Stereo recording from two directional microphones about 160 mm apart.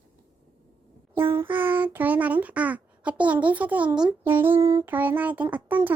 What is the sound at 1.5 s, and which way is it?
A child's voice, 10° right (ahead or behind).